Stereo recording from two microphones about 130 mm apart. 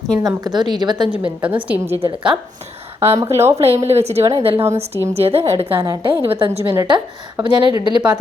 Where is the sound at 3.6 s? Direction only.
50° right (ahead or behind); by 8.0 s 35° right (ahead or behind).